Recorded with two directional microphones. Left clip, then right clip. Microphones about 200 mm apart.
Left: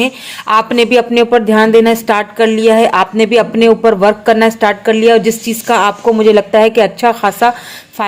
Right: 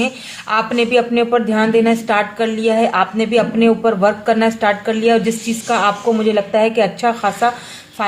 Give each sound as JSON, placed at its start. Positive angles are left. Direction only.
{"t": 0.0, "sound": "speech", "side_deg": 40}